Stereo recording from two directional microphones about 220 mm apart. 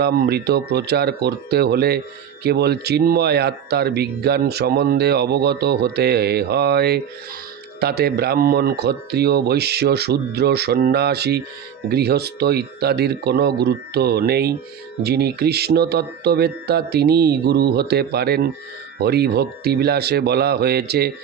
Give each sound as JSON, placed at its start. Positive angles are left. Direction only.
{"t": 0.0, "sound": "speech", "side_deg": -45}